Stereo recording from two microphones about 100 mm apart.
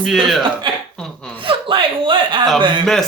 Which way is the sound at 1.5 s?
60° right (ahead or behind).